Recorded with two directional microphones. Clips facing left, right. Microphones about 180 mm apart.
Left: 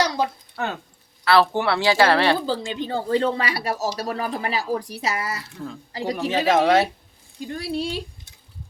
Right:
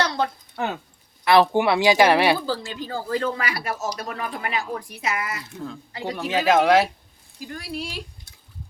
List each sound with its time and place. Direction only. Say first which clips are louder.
0.0 s a sound: left 1 dB; 10° left (ahead or behind)
0.5 s speech: right 1 dB; 10° right (ahead or behind)
2.5 s a man's voice: left 3 dB; 20° left (ahead or behind)
6.1 s speech: even; centre (ahead or behind)
7.3 s speech: left 5 dB; 30° left (ahead or behind)